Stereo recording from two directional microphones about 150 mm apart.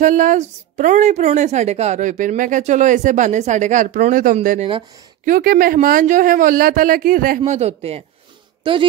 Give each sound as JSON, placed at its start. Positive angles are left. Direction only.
{"t": 0.0, "sound": "a woman's voice", "side_deg": -55}
{"t": 5.2, "sound": "speech", "side_deg": -75}
{"t": 7.4, "sound": "a woman's voice", "side_deg": -45}